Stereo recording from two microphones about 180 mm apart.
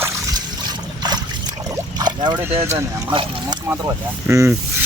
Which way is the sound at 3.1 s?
30° right (ahead or behind).